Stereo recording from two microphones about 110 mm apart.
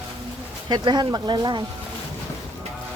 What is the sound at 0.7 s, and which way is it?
Speech, 40° right (ahead or behind).